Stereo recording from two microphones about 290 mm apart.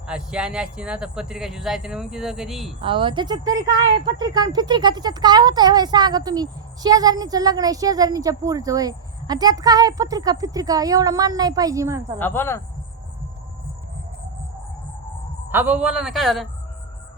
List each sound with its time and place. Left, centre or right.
0.1 s speech: centre
2.8 s speech: centre
12.2 s speech: centre
15.4 s speech: centre